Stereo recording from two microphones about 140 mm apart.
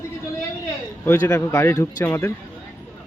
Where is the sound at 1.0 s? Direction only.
15° left (ahead or behind).